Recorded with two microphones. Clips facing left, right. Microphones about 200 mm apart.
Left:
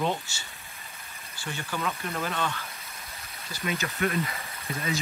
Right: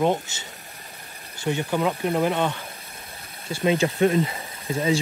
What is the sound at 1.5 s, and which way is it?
Speech, 20° right (ahead or behind).